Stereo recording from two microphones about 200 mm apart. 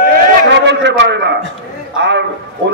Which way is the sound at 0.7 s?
60° right (ahead or behind).